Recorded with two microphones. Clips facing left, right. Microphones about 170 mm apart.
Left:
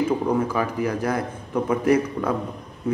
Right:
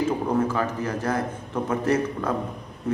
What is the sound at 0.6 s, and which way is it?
A man's voice, 15° left (ahead or behind).